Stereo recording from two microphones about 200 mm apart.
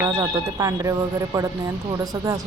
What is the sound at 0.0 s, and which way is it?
Speech, 15° right (ahead or behind).